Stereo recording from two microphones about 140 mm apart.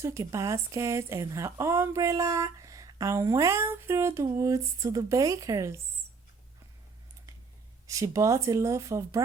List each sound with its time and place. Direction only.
0.0 s speech: 20° right (ahead or behind)
7.9 s speech: 25° right (ahead or behind)